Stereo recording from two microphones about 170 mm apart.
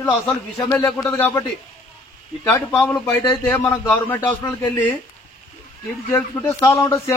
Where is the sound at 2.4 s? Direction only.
10° left (ahead or behind).